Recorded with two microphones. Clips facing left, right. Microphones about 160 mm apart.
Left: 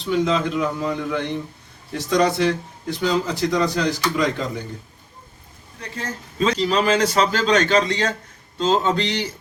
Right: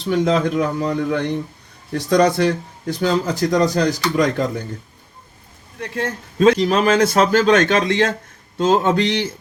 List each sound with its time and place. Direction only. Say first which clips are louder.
0.0 s speech: right 3 dB; 40° right (ahead or behind)
5.8 s a man's voice: right 7 dB; 65° right (ahead or behind)